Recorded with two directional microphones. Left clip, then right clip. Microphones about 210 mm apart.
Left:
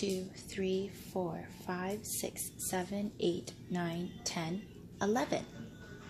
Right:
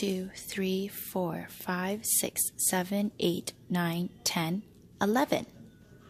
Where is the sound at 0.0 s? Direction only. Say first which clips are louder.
Right 4 dB; 45° right (ahead or behind).